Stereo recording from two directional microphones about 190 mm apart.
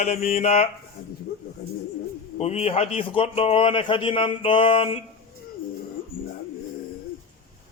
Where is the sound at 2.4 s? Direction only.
35° left (ahead or behind).